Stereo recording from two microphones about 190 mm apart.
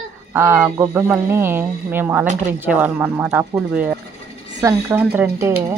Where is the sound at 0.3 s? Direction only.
10° right (ahead or behind).